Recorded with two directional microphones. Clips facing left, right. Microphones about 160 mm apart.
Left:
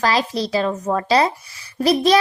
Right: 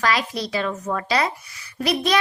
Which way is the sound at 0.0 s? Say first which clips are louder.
Left 4 dB; 30° left (ahead or behind).